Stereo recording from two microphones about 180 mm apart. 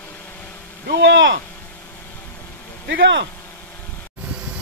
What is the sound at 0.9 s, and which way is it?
Speech, 85° right.